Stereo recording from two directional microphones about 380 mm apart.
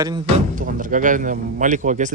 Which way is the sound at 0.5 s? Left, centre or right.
Right.